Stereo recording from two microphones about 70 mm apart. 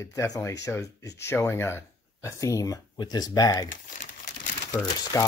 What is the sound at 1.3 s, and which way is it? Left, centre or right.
Speech, left.